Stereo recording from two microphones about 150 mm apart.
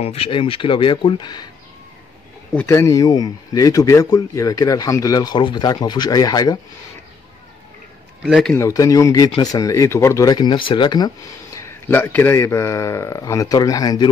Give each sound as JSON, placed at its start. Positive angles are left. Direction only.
{"t": 0.0, "sound": "speech", "side_deg": 40}
{"t": 2.6, "sound": "speech", "side_deg": 20}
{"t": 8.2, "sound": "a man's voice", "side_deg": 0}
{"t": 8.5, "sound": "speech", "side_deg": 20}
{"t": 11.5, "sound": "speech", "side_deg": 15}